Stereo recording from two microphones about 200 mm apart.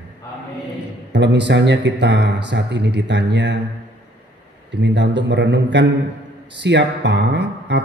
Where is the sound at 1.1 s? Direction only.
60° right (ahead or behind).